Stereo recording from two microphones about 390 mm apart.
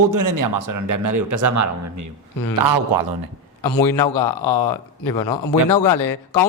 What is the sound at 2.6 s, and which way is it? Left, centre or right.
Speech, right.